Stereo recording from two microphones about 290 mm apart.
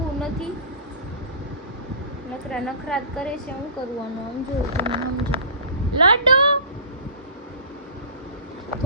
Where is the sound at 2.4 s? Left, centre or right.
Centre.